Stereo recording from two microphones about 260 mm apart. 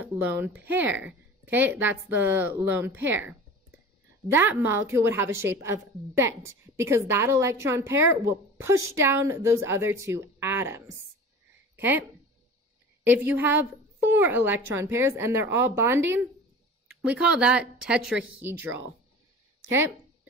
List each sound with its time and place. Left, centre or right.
0.0 s a woman's voice: centre
11.7 s a sound: centre
13.0 s a woman's voice: centre